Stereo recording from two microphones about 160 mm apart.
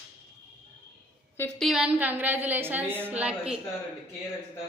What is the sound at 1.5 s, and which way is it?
A woman's voice, centre (ahead or behind).